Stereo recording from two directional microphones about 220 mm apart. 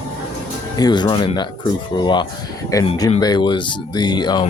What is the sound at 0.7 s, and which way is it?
Speech, 20° left (ahead or behind).